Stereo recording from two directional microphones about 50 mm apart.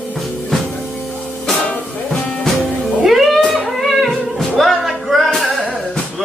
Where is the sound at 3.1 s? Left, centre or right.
Centre.